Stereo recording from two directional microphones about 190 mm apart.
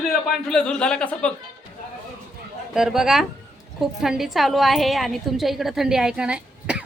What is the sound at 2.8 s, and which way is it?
A woman's voice, centre (ahead or behind).